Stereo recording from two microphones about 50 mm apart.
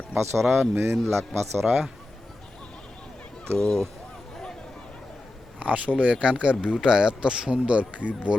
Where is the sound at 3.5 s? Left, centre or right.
Centre.